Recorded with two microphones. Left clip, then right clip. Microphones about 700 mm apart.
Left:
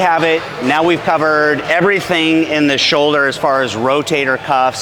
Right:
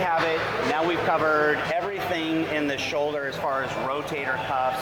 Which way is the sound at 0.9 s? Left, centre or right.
Left.